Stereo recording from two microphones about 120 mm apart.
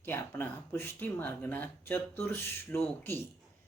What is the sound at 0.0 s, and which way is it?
Speech, 20° left (ahead or behind).